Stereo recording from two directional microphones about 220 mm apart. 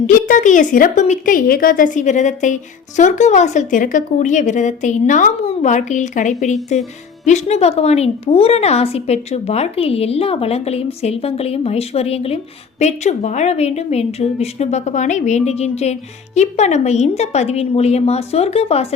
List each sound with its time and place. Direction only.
0.1 s a woman's voice: 35° left (ahead or behind)